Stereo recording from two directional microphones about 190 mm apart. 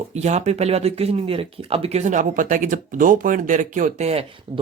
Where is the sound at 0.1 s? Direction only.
35° right (ahead or behind).